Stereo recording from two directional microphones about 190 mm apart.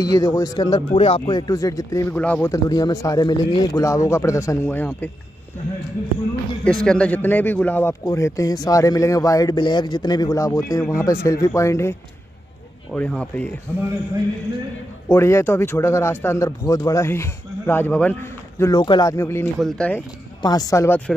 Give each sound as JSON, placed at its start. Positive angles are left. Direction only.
{"t": 0.0, "sound": "speech", "side_deg": 20}
{"t": 6.6, "sound": "speech", "side_deg": 5}
{"t": 12.9, "sound": "speech", "side_deg": 5}
{"t": 15.0, "sound": "speech", "side_deg": 15}
{"t": 20.4, "sound": "speech", "side_deg": 20}